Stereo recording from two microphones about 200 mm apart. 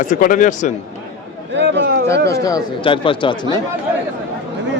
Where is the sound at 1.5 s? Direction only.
60° right (ahead or behind).